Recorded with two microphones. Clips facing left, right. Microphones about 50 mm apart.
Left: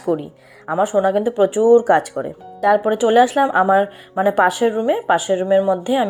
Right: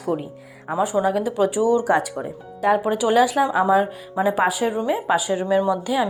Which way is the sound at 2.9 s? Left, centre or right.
Left.